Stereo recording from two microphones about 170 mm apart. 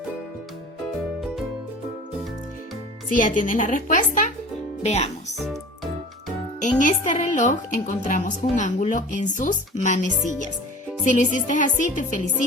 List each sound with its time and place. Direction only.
3.1 s speech: 50° left (ahead or behind)
6.6 s a woman's voice: 50° left (ahead or behind)